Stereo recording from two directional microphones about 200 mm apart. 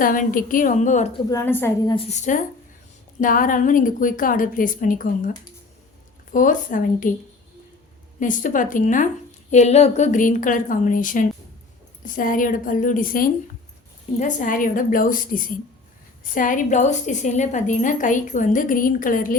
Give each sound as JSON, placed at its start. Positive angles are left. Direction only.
{"t": 0.0, "sound": "a woman's voice", "side_deg": 45}
{"t": 1.3, "sound": "a woman's voice", "side_deg": 10}
{"t": 2.0, "sound": "a woman's voice", "side_deg": 35}
{"t": 6.3, "sound": "a woman's voice", "side_deg": 40}
{"t": 8.2, "sound": "a woman's voice", "side_deg": 40}